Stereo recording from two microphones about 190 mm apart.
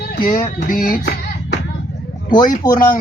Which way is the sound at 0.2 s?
45° left (ahead or behind).